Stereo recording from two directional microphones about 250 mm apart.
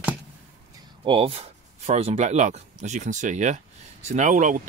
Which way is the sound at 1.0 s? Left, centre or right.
Right.